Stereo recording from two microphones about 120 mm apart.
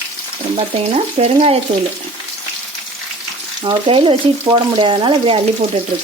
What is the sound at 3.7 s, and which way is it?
Frying, 45° right (ahead or behind).